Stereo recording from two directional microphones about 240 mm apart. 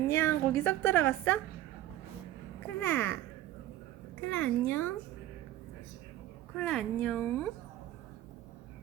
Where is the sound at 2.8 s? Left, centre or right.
Centre.